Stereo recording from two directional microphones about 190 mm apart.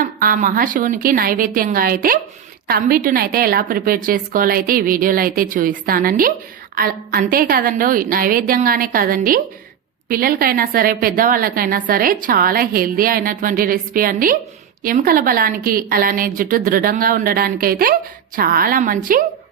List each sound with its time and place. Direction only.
0.0 s a woman's voice: 45° right (ahead or behind)